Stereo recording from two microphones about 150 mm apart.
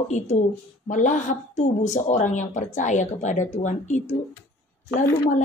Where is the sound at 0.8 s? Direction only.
55° left (ahead or behind).